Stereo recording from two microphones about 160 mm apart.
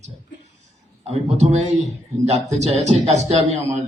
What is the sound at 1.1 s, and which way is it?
A man's voice, 40° right (ahead or behind).